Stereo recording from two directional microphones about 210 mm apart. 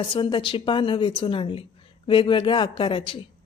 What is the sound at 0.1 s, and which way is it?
A woman's voice, 25° left (ahead or behind).